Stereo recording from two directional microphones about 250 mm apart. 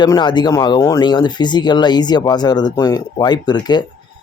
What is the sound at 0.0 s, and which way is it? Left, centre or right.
Speech, centre.